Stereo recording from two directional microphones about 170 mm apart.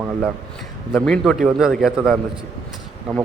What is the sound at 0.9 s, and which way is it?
A man's voice, centre (ahead or behind).